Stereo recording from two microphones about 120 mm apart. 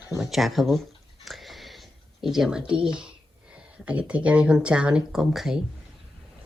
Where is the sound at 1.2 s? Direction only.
Centre (ahead or behind).